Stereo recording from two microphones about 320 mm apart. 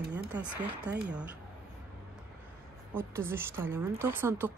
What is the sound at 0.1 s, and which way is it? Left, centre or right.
Speech, centre.